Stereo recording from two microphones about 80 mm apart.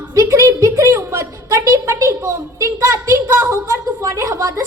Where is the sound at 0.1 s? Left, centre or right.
Right.